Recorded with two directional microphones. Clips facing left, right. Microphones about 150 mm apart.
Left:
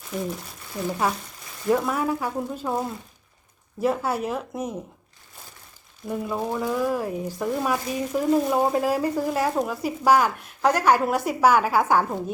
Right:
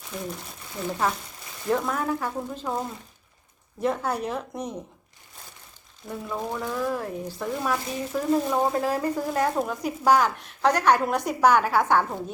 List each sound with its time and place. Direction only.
0.1 s a woman's voice: 5° left (ahead or behind)
6.1 s speech: 10° left (ahead or behind)